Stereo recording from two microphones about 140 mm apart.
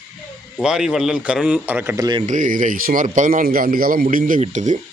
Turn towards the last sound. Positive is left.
turn(degrees=-60)  # may be behind; listen again after turning